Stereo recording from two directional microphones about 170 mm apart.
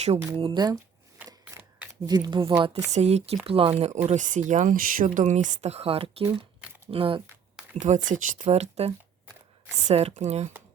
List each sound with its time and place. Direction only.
0.3 s speech: 30° right (ahead or behind)
2.0 s speech: 25° right (ahead or behind)
2.7 s speech: 40° right (ahead or behind)
7.8 s speech: 45° right (ahead or behind)